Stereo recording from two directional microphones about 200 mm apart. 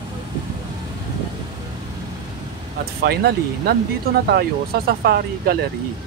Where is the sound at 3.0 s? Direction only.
50° right (ahead or behind).